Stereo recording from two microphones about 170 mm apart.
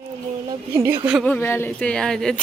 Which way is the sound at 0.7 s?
15° right (ahead or behind).